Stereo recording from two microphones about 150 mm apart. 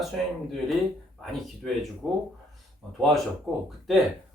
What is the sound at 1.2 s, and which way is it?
Speech, centre (ahead or behind).